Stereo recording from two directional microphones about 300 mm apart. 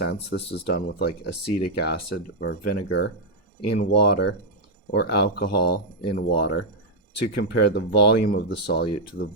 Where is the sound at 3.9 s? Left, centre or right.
Left.